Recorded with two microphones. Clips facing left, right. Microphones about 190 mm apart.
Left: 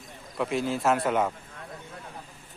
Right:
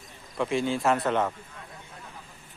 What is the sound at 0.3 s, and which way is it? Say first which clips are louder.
Speech: right 1 dB; centre (ahead or behind).